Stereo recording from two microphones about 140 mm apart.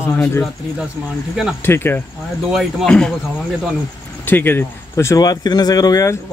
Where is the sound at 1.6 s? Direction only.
15° left (ahead or behind).